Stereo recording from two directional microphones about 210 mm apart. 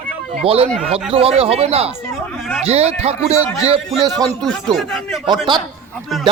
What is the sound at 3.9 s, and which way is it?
Speech, centre (ahead or behind).